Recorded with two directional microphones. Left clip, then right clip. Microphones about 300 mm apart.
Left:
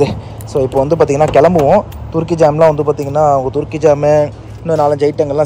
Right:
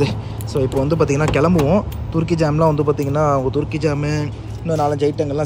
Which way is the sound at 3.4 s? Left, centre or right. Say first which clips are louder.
Left 6 dB; centre.